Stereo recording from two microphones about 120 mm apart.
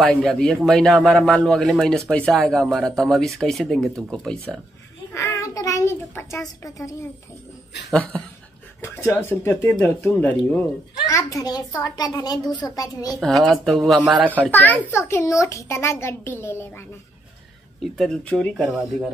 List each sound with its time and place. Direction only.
0.0 s speech: 5° left (ahead or behind)
5.1 s child singing: 25° left (ahead or behind)
6.6 s a child's voice: 25° left (ahead or behind)
7.9 s speech: 5° left (ahead or behind)
8.8 s a child's voice: 20° left (ahead or behind)
11.1 s a child's voice: 30° left (ahead or behind)
13.2 s speech: centre (ahead or behind)
14.4 s a child's voice: 15° left (ahead or behind)
17.9 s speech: 5° left (ahead or behind)